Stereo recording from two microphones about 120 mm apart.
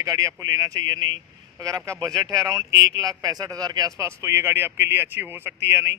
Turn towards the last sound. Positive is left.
turn(degrees=-20)  # may be behind; listen again after turning